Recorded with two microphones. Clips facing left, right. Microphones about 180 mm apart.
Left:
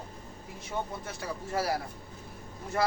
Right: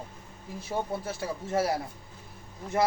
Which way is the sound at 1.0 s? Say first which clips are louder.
Right 4 dB; 25° right (ahead or behind).